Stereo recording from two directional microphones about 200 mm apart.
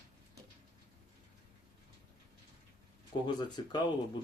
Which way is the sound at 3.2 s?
20° left (ahead or behind).